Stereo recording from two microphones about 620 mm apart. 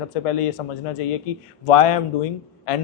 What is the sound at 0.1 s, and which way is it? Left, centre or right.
A man's voice, left.